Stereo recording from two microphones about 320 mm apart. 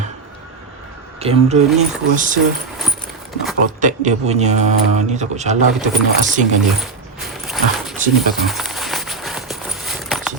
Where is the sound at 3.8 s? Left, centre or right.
Right.